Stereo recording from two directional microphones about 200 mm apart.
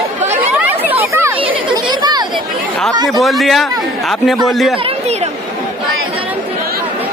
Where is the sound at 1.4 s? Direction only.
25° right (ahead or behind).